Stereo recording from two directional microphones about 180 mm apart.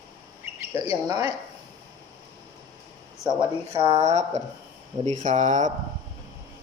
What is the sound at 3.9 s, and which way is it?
Speech, 40° right (ahead or behind).